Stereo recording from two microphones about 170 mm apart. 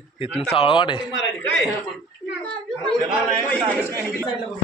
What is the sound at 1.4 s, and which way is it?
Chuckle, 10° left (ahead or behind).